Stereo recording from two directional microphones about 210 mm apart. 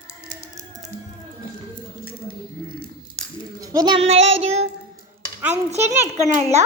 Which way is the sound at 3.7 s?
20° right (ahead or behind).